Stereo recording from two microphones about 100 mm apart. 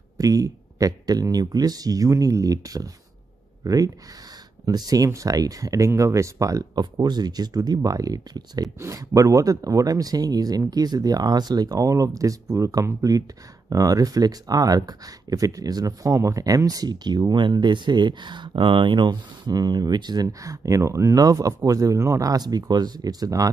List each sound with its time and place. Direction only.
0.2 s speech: 35° right (ahead or behind)
8.7 s speech: 30° right (ahead or behind)